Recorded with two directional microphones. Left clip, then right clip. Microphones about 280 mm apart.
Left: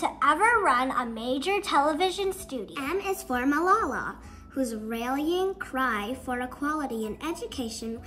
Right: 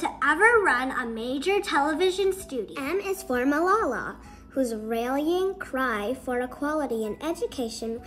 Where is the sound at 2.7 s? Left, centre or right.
Centre.